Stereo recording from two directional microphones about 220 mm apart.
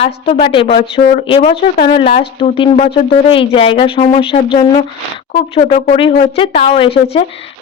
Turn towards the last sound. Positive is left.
turn(degrees=25)  # may be behind; listen again after turning